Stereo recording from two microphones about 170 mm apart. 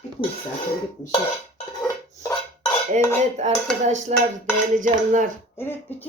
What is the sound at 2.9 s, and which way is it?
Cutlery, 40° right (ahead or behind).